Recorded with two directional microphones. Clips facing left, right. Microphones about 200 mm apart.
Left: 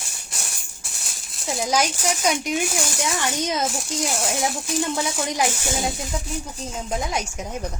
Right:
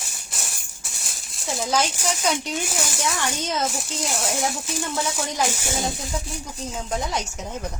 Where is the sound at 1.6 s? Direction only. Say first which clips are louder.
Left 1 dB; 10° left (ahead or behind).